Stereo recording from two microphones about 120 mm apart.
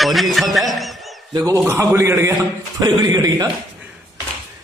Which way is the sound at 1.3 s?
30° right (ahead or behind).